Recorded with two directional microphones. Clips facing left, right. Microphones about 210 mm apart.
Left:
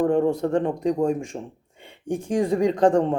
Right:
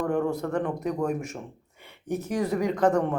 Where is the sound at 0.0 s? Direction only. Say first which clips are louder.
Left 6 dB; 25° left (ahead or behind).